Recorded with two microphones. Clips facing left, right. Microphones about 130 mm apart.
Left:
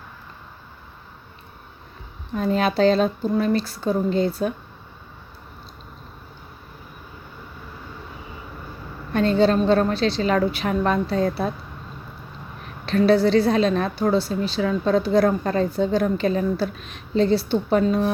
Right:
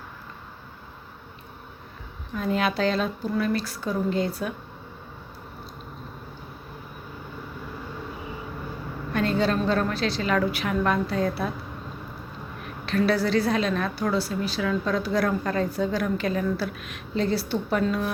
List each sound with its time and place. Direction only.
2.3 s a woman's voice: 30° left (ahead or behind)
9.1 s a woman's voice: 30° left (ahead or behind)
12.8 s a woman's voice: 25° left (ahead or behind)